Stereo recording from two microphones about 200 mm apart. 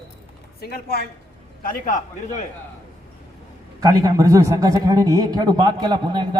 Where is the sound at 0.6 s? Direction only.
50° left (ahead or behind).